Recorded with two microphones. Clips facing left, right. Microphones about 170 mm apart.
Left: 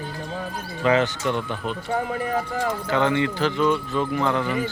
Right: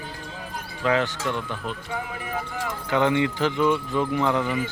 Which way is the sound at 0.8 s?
Centre (ahead or behind).